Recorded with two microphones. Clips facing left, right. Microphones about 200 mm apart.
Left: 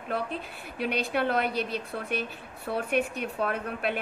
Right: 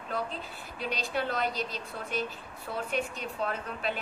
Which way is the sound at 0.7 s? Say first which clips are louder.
Left 5 dB; 60° left (ahead or behind).